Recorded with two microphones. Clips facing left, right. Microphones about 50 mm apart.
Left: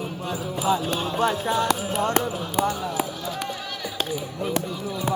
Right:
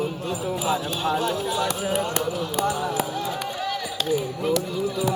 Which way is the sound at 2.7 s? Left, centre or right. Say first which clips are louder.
Right 2 dB; centre.